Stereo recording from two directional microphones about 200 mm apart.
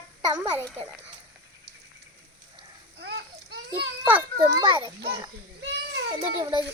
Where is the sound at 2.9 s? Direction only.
55° right (ahead or behind).